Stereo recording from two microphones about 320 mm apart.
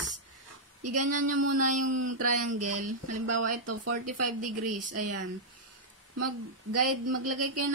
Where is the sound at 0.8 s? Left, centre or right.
Right.